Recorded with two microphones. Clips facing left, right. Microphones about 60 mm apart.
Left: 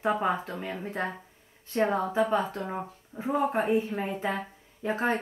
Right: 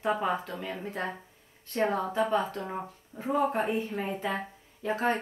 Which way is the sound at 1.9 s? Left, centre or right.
Left.